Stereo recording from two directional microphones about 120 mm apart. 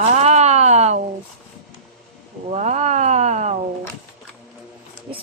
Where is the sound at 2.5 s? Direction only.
75° right (ahead or behind).